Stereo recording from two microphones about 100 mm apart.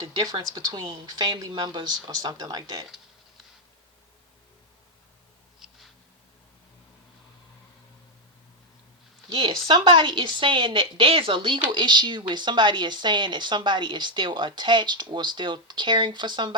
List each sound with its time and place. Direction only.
0.0 s speech: 40° right (ahead or behind)
5.5 s a sound: 5° right (ahead or behind)
9.3 s a woman's voice: 60° right (ahead or behind)